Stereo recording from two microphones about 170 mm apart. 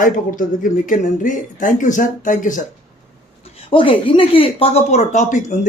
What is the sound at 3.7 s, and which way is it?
Speech, 30° left (ahead or behind).